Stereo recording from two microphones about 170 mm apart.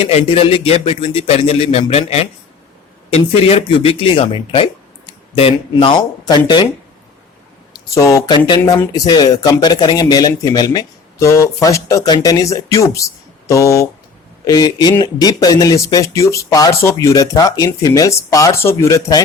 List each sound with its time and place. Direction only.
0.0 s speech: 40° left (ahead or behind)
7.9 s speech: 15° left (ahead or behind)